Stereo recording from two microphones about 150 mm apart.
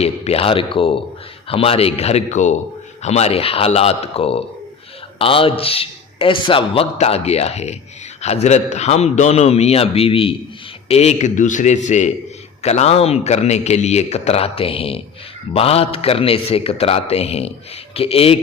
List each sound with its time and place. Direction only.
0.0 s a man's voice: 40° left (ahead or behind)